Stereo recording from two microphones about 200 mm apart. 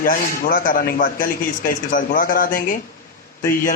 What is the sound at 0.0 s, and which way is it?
Speech, 45° left (ahead or behind).